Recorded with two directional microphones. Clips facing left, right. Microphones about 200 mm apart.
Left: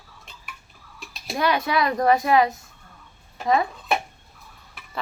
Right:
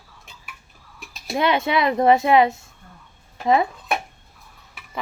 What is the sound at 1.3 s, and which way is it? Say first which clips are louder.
Speech: right 2 dB; 25° right (ahead or behind).